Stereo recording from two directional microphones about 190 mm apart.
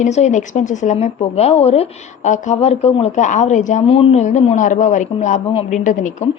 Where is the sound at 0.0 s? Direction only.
35° left (ahead or behind).